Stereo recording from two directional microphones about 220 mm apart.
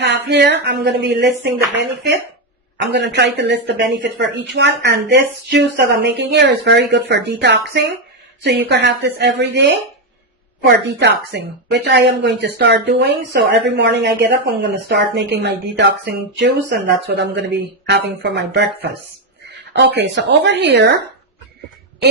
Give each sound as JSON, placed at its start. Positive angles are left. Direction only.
{"t": 0.3, "sound": "a woman's voice", "side_deg": -50}